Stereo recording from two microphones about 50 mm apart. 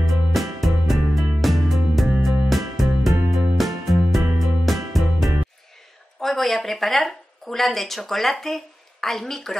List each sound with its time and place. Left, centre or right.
0.0 s music: centre
6.2 s a woman's voice: centre